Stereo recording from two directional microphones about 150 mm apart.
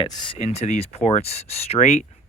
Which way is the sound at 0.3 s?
45° left (ahead or behind).